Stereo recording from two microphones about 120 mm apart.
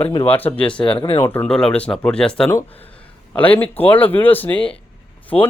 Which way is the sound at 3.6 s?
15° left (ahead or behind).